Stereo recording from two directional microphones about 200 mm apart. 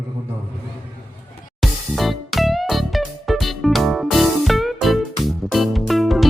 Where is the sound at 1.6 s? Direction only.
Centre (ahead or behind).